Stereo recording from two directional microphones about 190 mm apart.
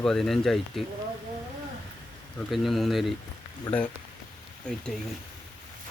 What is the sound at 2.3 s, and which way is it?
Speech, centre (ahead or behind).